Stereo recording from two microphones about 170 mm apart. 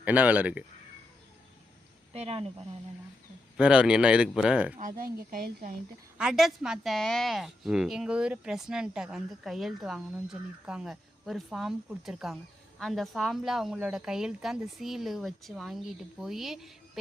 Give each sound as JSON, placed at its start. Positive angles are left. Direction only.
{"t": 0.0, "sound": "speech", "side_deg": -10}
{"t": 2.1, "sound": "speech", "side_deg": -35}
{"t": 3.6, "sound": "speech", "side_deg": -5}
{"t": 4.8, "sound": "speech", "side_deg": -55}
{"t": 6.1, "sound": "a woman's voice", "side_deg": -5}